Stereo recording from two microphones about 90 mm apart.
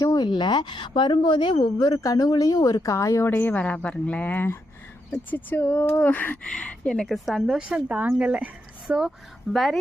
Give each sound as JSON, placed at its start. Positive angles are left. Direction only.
{"t": 0.0, "sound": "a woman's voice", "side_deg": 50}
{"t": 7.6, "sound": "speech", "side_deg": -15}
{"t": 9.5, "sound": "speech", "side_deg": 0}